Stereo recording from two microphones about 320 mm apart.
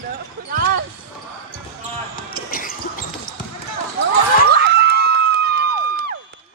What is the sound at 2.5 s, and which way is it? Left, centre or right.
Basketball bounce, left.